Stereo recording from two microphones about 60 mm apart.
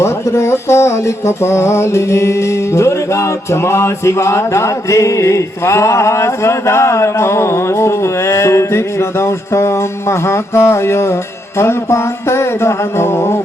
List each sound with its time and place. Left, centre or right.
0.0 s music: left